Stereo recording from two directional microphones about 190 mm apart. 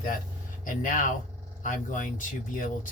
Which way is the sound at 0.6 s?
45° left (ahead or behind).